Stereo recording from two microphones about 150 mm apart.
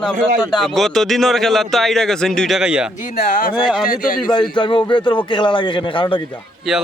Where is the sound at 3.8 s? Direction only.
70° left (ahead or behind).